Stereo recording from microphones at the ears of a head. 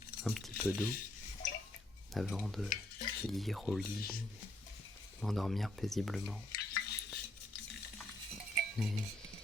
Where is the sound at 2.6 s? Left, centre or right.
Left.